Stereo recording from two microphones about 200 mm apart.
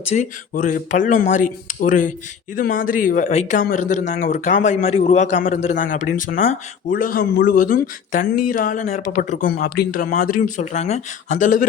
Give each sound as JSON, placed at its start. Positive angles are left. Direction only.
{"t": 0.1, "sound": "speech", "side_deg": 40}